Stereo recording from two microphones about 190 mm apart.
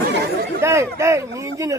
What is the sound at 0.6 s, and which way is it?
Speech, 15° right (ahead or behind).